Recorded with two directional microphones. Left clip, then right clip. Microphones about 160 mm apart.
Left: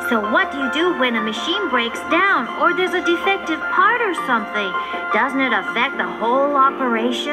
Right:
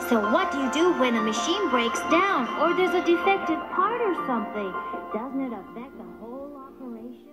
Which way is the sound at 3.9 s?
55° left (ahead or behind).